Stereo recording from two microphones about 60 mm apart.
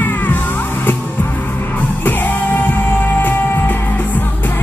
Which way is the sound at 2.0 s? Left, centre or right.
Left.